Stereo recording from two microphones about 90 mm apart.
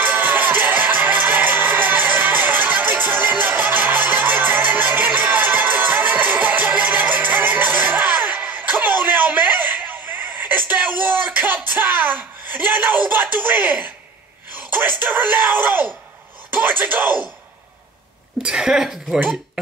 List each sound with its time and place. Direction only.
0.0 s music: 20° right (ahead or behind)
10.4 s a sound: 20° right (ahead or behind)
14.5 s speech: 20° right (ahead or behind)
16.4 s a sound: 20° right (ahead or behind)
16.8 s speech: 15° right (ahead or behind)
18.4 s speech: 10° right (ahead or behind)